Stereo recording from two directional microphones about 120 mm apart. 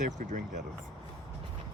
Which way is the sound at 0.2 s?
90° right.